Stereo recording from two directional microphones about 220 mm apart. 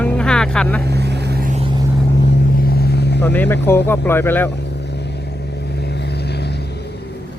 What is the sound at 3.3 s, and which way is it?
Speech, 10° left (ahead or behind).